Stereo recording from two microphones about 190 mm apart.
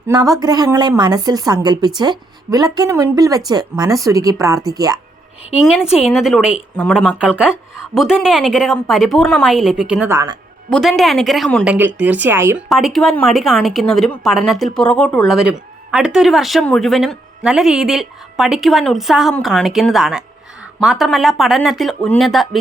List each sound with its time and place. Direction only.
0.1 s a woman's voice: 20° right (ahead or behind)
5.5 s speech: 5° right (ahead or behind)
7.2 s speech: 5° right (ahead or behind)
12.6 s speech: centre (ahead or behind)